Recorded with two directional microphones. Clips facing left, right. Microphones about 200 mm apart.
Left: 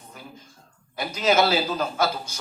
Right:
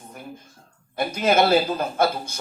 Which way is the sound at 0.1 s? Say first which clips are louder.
Right 5 dB; 55° right (ahead or behind).